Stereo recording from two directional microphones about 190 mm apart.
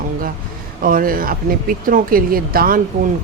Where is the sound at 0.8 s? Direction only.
45° right (ahead or behind).